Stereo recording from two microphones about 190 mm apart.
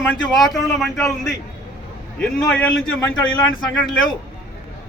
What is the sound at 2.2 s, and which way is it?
Speech, 5° left (ahead or behind).